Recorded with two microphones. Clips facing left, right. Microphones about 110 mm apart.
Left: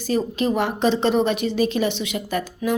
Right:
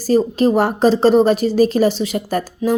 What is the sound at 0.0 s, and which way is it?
Speech, 40° right (ahead or behind).